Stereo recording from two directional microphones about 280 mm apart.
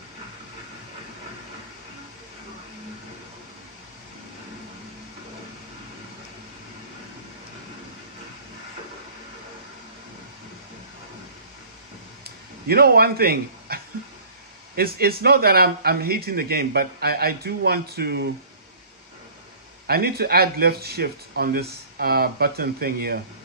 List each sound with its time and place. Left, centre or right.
12.6 s speech: right
14.8 s speech: right
19.9 s speech: right